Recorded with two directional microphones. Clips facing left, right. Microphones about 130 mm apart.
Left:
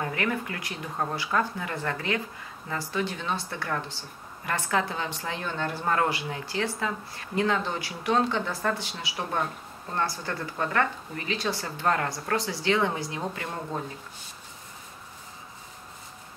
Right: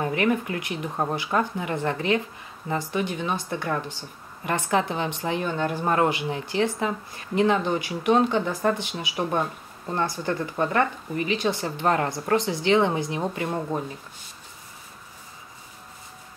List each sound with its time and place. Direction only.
0.0 s speech: 20° right (ahead or behind)